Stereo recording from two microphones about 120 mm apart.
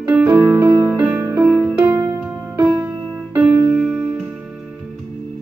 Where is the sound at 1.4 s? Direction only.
5° left (ahead or behind).